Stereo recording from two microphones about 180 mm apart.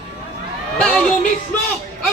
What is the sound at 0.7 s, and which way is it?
Speech, 5° left (ahead or behind).